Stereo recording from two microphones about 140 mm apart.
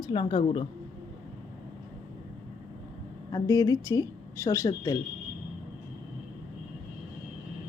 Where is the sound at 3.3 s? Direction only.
25° left (ahead or behind).